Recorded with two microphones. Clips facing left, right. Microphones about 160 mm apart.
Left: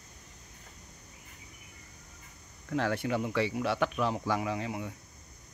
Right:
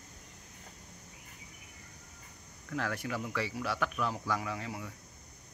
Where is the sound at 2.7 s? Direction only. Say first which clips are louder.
Left 6 dB; 25° left (ahead or behind).